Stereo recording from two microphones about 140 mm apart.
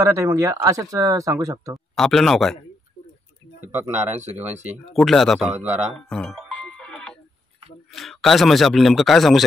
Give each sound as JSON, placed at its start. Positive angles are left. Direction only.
{"t": 0.0, "sound": "speech", "side_deg": -25}
{"t": 2.0, "sound": "a man's voice", "side_deg": 5}
{"t": 3.6, "sound": "speech", "side_deg": -15}
{"t": 4.9, "sound": "a man's voice", "side_deg": 0}
{"t": 5.9, "sound": "music", "side_deg": 5}
{"t": 7.9, "sound": "a man's voice", "side_deg": 0}